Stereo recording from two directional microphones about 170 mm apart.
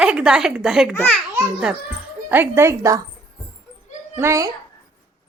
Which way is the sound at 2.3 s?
15° right (ahead or behind).